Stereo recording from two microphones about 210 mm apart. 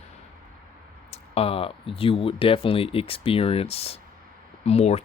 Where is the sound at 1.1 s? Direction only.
30° left (ahead or behind).